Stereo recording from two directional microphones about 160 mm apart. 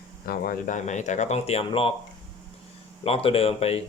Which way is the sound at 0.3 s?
60° left (ahead or behind).